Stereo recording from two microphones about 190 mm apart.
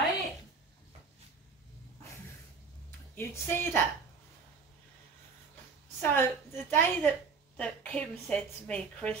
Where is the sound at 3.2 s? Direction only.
10° left (ahead or behind).